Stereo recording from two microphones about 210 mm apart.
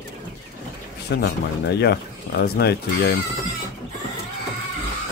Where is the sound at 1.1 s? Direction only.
50° left (ahead or behind).